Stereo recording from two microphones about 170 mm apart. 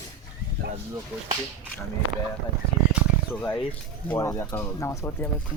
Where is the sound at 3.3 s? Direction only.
10° left (ahead or behind).